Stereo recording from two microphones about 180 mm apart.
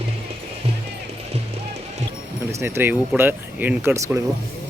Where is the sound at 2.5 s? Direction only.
15° right (ahead or behind).